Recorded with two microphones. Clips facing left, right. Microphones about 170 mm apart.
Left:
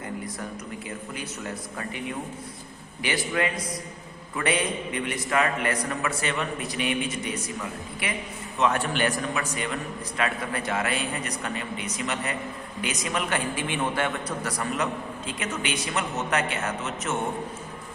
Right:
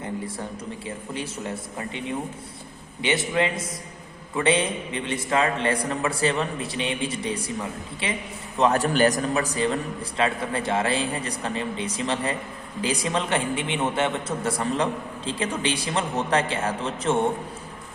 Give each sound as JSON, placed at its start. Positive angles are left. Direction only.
{"t": 0.9, "sound": "a man's voice", "side_deg": -30}